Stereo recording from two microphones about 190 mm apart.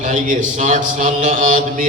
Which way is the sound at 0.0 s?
40° right (ahead or behind).